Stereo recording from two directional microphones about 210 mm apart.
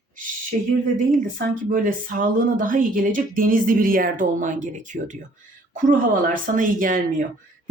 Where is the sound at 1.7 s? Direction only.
40° right (ahead or behind).